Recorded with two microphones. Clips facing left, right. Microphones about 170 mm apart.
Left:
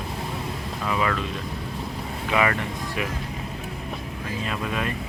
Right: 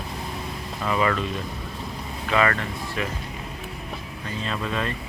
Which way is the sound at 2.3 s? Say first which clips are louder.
Right 1 dB; 15° left (ahead or behind).